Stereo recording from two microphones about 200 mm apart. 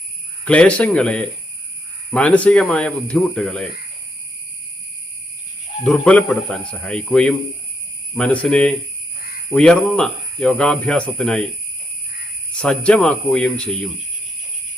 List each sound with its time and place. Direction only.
0.4 s speech: 5° left (ahead or behind)
5.8 s speech: 5° left (ahead or behind)
12.5 s speech: 5° left (ahead or behind)